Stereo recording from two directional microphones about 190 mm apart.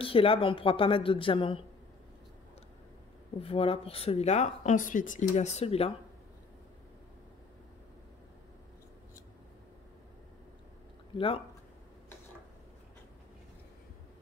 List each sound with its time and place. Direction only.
0.0 s a woman's voice: 30° left (ahead or behind)
3.3 s speech: 30° left (ahead or behind)
11.1 s a woman's voice: 30° left (ahead or behind)